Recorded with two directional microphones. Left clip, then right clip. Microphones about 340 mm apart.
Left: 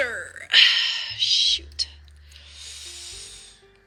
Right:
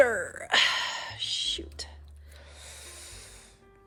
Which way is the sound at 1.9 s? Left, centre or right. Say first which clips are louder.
Left 6 dB; centre.